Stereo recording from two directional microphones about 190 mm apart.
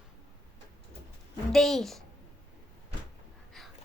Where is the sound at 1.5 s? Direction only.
Centre (ahead or behind).